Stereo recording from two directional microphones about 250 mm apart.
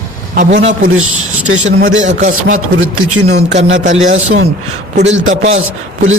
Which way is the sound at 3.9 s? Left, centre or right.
Right.